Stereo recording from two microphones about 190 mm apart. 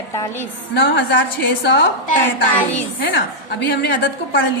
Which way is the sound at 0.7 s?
75° left (ahead or behind).